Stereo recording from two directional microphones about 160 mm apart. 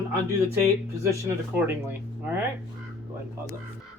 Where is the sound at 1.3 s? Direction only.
15° right (ahead or behind).